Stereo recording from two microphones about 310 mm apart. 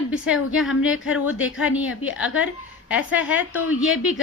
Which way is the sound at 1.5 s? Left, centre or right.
Centre.